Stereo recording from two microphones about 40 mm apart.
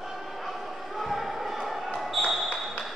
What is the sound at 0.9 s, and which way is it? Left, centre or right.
Basketball bounce, centre.